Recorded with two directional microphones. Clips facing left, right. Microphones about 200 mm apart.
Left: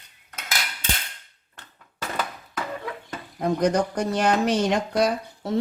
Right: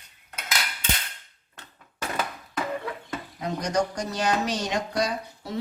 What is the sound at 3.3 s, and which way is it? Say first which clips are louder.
Speech: left 5 dB; 55° left (ahead or behind).